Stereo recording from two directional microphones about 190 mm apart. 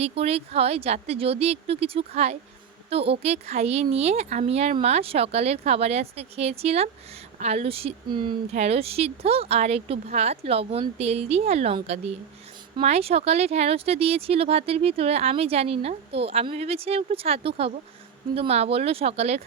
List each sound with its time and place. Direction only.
0.0 s speech: 35° right (ahead or behind)
8.5 s speech: 35° right (ahead or behind)